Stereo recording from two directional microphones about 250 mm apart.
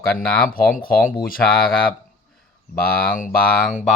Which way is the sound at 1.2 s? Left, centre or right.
Left.